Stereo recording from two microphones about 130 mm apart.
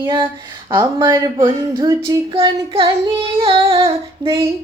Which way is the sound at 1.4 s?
40° right (ahead or behind).